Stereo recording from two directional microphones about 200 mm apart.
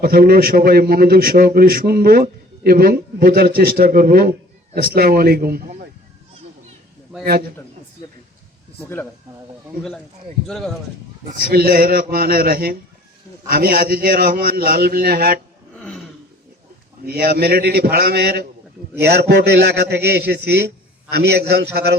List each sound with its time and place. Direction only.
0.0 s a man's voice: 50° right (ahead or behind)
7.1 s a sound: 5° right (ahead or behind)
8.8 s speech: 10° left (ahead or behind)
10.4 s speech: centre (ahead or behind)
11.3 s a man's voice: 45° right (ahead or behind)
15.7 s a sound: 5° left (ahead or behind)
17.0 s a man's voice: 50° right (ahead or behind)